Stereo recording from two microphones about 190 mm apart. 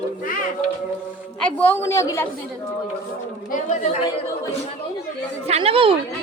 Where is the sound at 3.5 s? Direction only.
40° left (ahead or behind).